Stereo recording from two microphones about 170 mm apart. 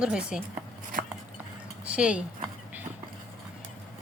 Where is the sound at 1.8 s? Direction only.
5° right (ahead or behind).